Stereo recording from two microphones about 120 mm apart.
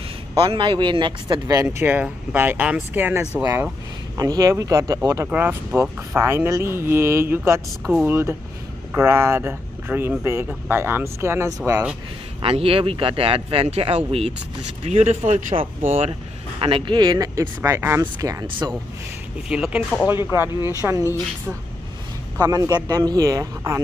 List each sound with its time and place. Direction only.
0.4 s speech: 45° right (ahead or behind)
1.8 s speech: 15° right (ahead or behind)
4.2 s speech: 30° right (ahead or behind)
12.4 s speech: 50° right (ahead or behind)
14.9 s speech: 65° right (ahead or behind)
16.0 s speech: 45° right (ahead or behind); by 17.5 s 30° right (ahead or behind)
17.6 s speech: 20° right (ahead or behind)
19.5 s speech: 5° right (ahead or behind)
20.1 s speech: 20° right (ahead or behind)
22.4 s speech: 35° right (ahead or behind)